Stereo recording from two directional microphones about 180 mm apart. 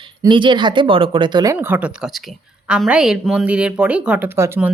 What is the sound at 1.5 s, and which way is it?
A woman's voice, 10° right (ahead or behind).